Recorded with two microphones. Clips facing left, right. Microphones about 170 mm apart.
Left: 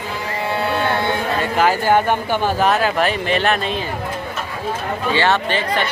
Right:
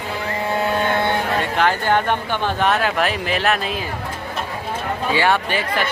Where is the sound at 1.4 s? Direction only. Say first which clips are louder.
Left 2 dB; 5° left (ahead or behind).